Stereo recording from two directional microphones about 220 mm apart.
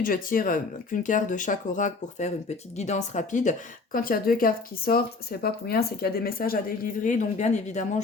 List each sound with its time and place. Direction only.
0.0 s speech: 40° left (ahead or behind)